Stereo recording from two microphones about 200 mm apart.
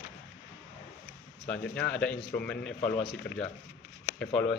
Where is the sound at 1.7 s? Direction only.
5° left (ahead or behind).